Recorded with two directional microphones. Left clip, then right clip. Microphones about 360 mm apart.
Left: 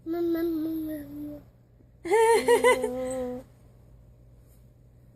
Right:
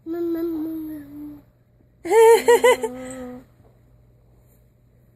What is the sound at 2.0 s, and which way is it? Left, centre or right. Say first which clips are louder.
Laughter: right 8 dB; right.